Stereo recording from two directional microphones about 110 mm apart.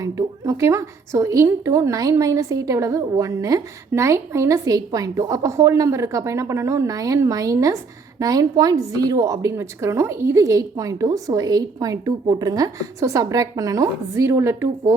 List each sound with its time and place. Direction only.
0.0 s a woman's voice: 30° right (ahead or behind)